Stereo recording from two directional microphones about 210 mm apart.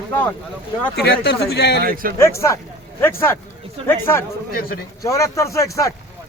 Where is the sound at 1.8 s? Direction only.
45° right (ahead or behind).